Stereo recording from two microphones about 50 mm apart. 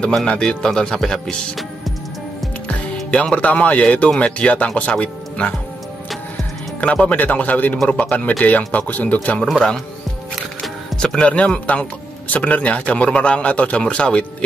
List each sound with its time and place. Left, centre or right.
0.1 s speech: centre
3.1 s speech: left
6.8 s speech: left
7.9 s speech: centre
8.3 s speech: left
9.4 s speech: centre
11.0 s speech: centre
11.2 s speech: left